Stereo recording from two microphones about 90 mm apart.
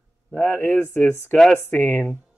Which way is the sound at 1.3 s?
5° left (ahead or behind).